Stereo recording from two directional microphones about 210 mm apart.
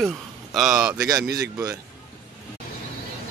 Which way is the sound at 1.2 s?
50° right (ahead or behind).